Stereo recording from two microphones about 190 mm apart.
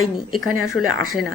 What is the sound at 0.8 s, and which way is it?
Speech, centre (ahead or behind).